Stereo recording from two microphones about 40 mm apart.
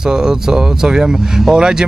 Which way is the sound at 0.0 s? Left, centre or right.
Centre.